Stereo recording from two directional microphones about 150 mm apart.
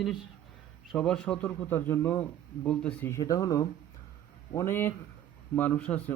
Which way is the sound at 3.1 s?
20° left (ahead or behind).